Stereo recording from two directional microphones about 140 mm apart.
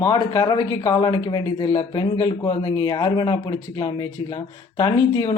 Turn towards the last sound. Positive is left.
turn(degrees=25)  # may be behind; listen again after turning